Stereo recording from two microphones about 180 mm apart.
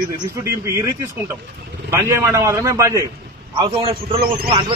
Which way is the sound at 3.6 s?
30° right (ahead or behind).